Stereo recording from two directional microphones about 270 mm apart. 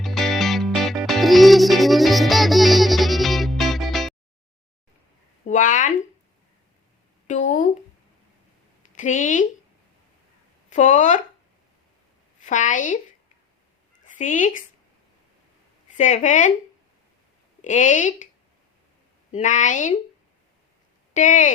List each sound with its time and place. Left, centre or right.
0.0 s music: centre
5.5 s speech: left
7.3 s speech: left
9.0 s speech: left
10.7 s speech: left
12.4 s a woman's voice: left
14.0 s speech: left
16.0 s speech: left
17.6 s speech: left
19.3 s speech: left
21.1 s speech: left